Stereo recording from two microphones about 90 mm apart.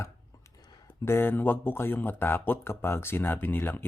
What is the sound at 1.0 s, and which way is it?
Speech, 25° left (ahead or behind).